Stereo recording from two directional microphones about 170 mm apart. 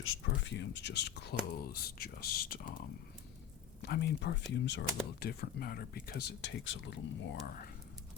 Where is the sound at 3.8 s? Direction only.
75° left (ahead or behind).